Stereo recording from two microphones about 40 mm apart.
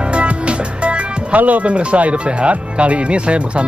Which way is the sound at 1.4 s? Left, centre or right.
Right.